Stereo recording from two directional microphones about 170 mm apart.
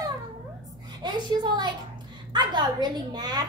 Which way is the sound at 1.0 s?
25° right (ahead or behind).